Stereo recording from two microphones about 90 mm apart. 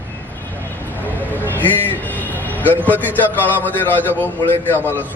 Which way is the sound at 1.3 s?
20° left (ahead or behind).